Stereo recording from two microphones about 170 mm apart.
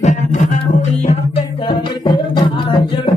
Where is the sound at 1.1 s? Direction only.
30° left (ahead or behind).